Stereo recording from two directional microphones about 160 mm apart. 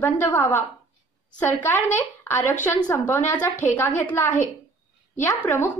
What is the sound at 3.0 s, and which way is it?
A woman's voice, 15° left (ahead or behind).